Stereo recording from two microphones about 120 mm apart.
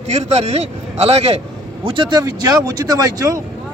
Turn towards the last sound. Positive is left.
turn(degrees=-30)  # may be behind; listen again after turning